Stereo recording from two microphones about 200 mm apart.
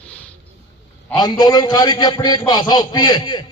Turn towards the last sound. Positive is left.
turn(degrees=20)  # may be behind; listen again after turning